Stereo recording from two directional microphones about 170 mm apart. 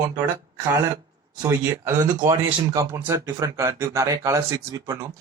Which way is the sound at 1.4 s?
15° right (ahead or behind).